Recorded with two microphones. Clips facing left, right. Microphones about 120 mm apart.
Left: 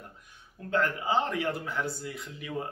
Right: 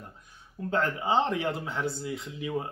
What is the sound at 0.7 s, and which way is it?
Speech, 25° right (ahead or behind).